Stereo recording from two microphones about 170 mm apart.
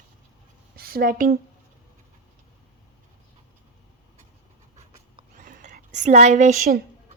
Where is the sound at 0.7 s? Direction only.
60° right (ahead or behind).